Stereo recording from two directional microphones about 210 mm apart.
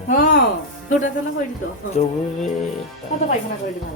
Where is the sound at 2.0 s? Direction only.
30° left (ahead or behind).